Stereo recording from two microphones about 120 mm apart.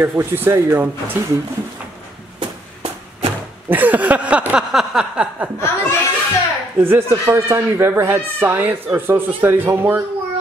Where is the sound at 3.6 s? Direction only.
15° right (ahead or behind).